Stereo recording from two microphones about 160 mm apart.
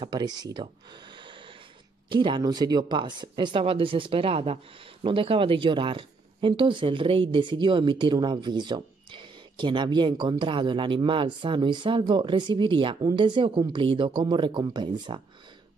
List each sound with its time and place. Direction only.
0.0 s speech: 25° right (ahead or behind)